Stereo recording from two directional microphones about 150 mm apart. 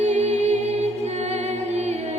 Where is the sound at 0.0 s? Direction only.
50° right (ahead or behind).